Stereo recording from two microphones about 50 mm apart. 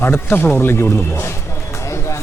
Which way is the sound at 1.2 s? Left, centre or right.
Left.